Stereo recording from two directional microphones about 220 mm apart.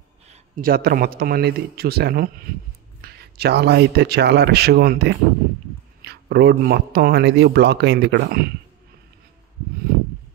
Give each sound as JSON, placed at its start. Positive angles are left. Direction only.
{"t": 0.3, "sound": "speech", "side_deg": -40}